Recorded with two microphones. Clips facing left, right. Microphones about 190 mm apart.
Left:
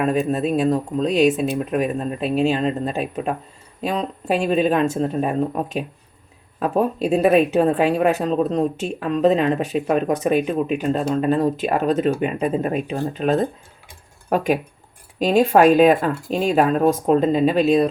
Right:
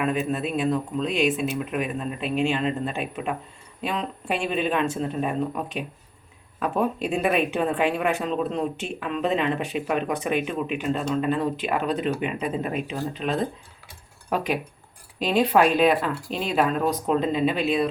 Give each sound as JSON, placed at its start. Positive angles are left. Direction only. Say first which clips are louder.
{"t": 0.0, "sound": "speech", "louder": "left 5 dB", "side_deg": 40}